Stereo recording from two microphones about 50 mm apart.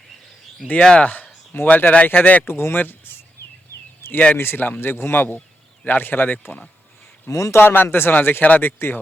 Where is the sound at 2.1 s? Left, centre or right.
Left.